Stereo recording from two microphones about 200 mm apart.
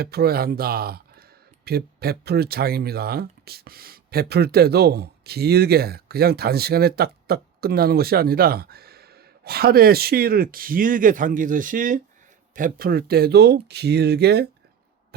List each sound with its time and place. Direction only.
0.0 s speech: 50° right (ahead or behind)